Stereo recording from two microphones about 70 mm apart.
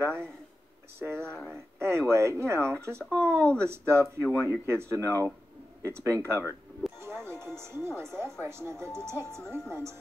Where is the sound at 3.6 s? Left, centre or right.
Right.